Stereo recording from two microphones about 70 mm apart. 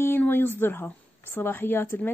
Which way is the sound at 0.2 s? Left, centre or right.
Left.